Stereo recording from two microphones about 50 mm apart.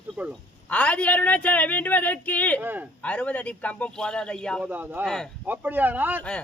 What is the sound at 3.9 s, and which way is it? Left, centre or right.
Speech, centre.